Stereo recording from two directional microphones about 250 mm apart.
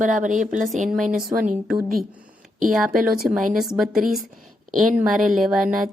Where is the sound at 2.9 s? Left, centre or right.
Right.